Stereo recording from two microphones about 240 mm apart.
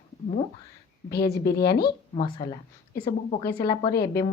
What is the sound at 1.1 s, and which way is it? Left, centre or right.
Speech, left.